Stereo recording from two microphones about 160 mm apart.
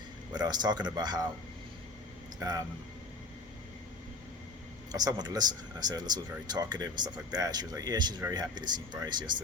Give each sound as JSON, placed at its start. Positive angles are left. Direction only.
{"t": 0.3, "sound": "speech", "side_deg": -25}
{"t": 2.4, "sound": "speech", "side_deg": -20}
{"t": 4.9, "sound": "speech", "side_deg": -25}